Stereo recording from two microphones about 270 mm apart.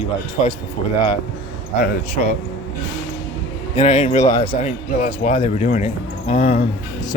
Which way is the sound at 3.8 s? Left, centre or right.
Left.